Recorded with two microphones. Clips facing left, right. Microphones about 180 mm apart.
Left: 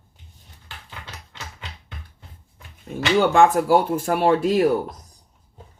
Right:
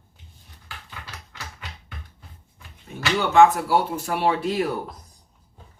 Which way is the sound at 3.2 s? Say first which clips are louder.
Even; 50° left (ahead or behind).